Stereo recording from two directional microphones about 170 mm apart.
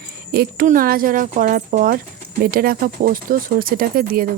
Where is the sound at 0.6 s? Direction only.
55° right (ahead or behind).